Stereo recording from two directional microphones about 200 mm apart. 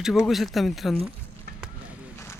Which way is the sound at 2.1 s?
15° left (ahead or behind).